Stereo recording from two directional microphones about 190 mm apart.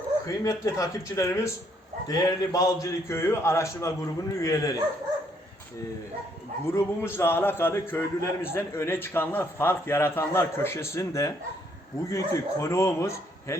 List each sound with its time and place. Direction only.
0.3 s a man's voice: 15° left (ahead or behind)
6.7 s a man's voice: 15° left (ahead or behind)